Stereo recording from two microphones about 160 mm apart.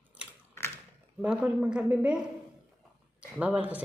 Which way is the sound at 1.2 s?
10° right (ahead or behind).